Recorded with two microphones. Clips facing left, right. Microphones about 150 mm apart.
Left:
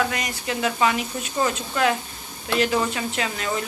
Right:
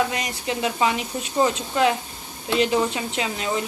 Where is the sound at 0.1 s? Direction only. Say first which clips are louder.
Right 1 dB; 25° right (ahead or behind).